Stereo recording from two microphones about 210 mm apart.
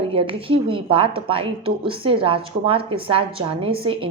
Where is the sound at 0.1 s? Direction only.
25° right (ahead or behind).